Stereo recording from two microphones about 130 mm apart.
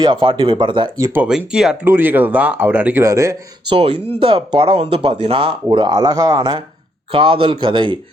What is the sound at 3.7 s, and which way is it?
Speech, 45° right (ahead or behind).